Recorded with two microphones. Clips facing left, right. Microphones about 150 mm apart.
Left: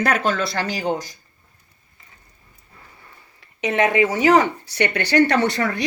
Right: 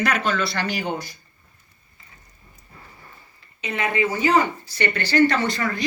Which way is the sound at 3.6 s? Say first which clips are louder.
Left 6 dB; 80° left.